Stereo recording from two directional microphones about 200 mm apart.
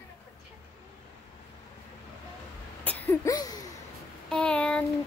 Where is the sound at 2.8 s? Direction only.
10° left (ahead or behind).